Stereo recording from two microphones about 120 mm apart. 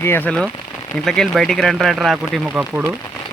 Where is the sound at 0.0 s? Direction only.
20° left (ahead or behind).